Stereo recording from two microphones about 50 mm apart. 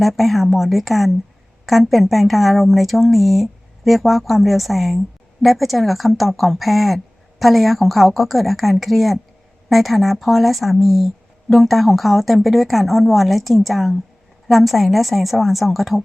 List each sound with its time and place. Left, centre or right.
0.0 s speech: centre